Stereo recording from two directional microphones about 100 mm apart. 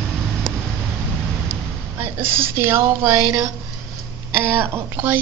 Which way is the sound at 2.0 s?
25° right (ahead or behind).